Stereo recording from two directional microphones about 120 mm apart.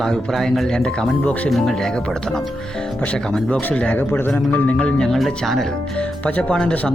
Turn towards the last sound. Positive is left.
turn(degrees=10)  # may be behind; listen again after turning